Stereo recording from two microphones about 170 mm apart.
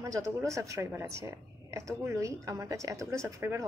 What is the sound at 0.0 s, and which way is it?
A woman's voice, 20° right (ahead or behind).